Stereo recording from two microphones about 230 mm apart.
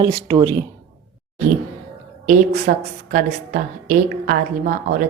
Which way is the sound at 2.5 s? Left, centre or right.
Right.